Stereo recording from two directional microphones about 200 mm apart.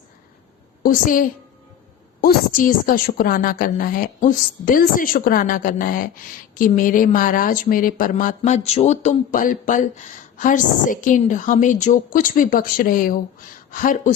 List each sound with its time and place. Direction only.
0.8 s a woman's voice: 45° left (ahead or behind)